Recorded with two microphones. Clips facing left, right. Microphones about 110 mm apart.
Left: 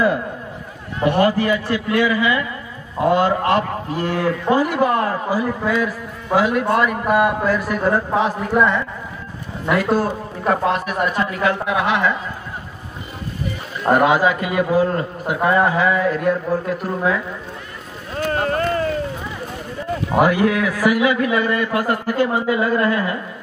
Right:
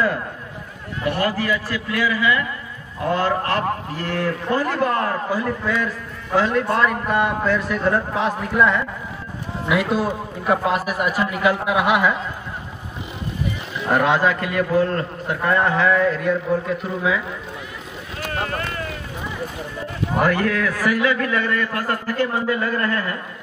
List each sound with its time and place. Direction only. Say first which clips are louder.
1.0 s a man's voice: left 6 dB; 20° left (ahead or behind); by 8.8 s centre (ahead or behind)
9.9 s a man's voice: left 2 dB; 5° right (ahead or behind)
13.9 s a man's voice: left 2 dB; 5° left (ahead or behind)
18.1 s boat: left 6 dB; 35° left (ahead or behind)
20.2 s a man's voice: left 4 dB; 10° left (ahead or behind)